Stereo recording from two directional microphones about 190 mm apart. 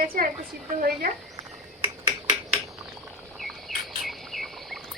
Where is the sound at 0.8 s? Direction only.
50° right (ahead or behind).